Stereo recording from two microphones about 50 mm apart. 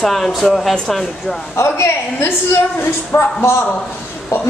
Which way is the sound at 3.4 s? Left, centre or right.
Left.